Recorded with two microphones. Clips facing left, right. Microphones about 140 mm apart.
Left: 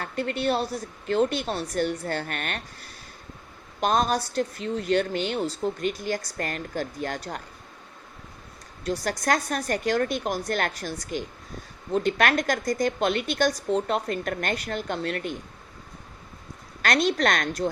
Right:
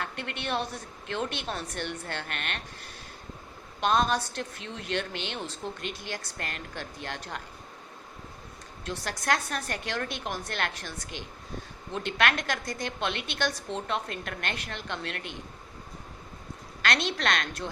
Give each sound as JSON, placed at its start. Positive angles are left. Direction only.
{"t": 0.0, "sound": "a woman's voice", "side_deg": 40}
{"t": 8.8, "sound": "a woman's voice", "side_deg": 40}
{"t": 16.8, "sound": "a woman's voice", "side_deg": 45}